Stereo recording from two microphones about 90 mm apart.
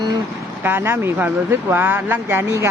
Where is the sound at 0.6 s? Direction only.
25° right (ahead or behind).